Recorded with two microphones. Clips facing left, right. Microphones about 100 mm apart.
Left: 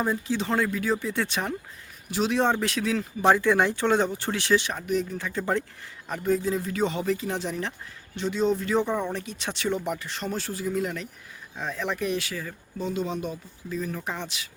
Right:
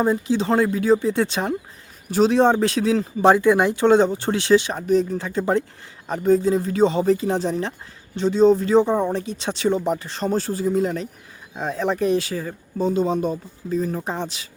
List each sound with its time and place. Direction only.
0.0 s speech: 25° right (ahead or behind)
3.3 s speech: 15° right (ahead or behind)
4.8 s speech: 35° right (ahead or behind)